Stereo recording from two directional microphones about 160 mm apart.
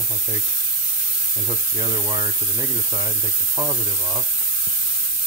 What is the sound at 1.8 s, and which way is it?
Speech, 25° right (ahead or behind).